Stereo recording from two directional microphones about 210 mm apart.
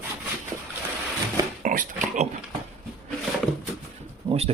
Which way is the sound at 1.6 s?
40° right (ahead or behind).